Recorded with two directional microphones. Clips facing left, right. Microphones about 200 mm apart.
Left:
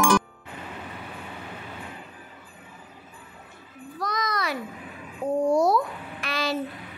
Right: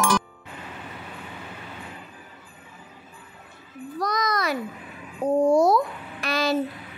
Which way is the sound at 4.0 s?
40° right (ahead or behind).